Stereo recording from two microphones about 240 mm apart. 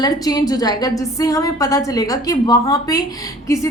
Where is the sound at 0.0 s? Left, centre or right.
Centre.